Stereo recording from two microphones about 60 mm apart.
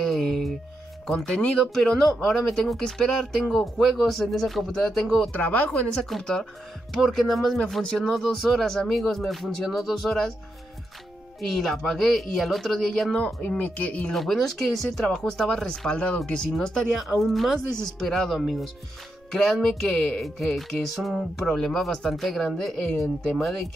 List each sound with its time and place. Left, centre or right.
0.0 s a sound: centre
1.0 s speech: centre
5.3 s speech: left
6.0 s speech: centre
11.4 s speech: centre
13.2 s speech: left
14.1 s speech: centre
16.9 s speech: centre